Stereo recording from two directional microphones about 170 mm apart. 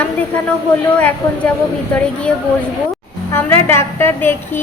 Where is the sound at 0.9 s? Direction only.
5° left (ahead or behind).